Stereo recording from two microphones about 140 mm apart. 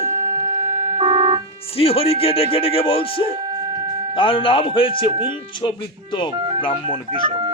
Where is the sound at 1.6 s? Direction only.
45° left (ahead or behind).